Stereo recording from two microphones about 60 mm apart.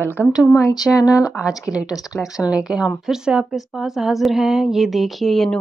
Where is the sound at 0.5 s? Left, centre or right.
Left.